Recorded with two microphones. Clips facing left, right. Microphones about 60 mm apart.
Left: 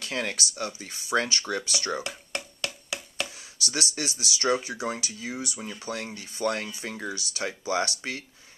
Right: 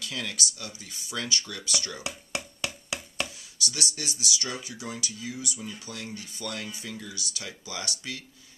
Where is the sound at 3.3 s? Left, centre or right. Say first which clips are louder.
Left 3 dB; left.